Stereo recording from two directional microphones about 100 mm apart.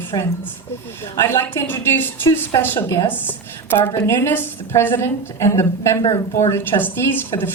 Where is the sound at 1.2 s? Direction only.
25° left (ahead or behind).